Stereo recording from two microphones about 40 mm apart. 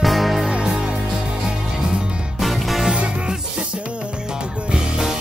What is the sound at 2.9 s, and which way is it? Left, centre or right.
Music, right.